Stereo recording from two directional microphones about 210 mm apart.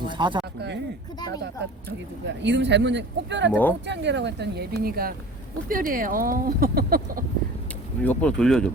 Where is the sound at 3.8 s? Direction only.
55° right (ahead or behind).